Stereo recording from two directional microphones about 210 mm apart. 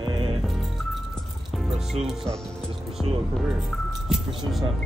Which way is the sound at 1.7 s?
Centre (ahead or behind).